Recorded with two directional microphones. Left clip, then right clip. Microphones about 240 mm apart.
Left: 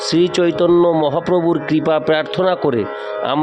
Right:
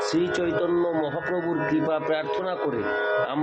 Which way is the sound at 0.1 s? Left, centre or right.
Left.